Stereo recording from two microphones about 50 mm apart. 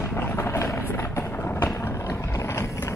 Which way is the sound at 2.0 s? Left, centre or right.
Left.